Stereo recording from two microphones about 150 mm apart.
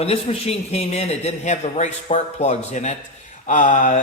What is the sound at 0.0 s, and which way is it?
A man's voice, 40° left (ahead or behind).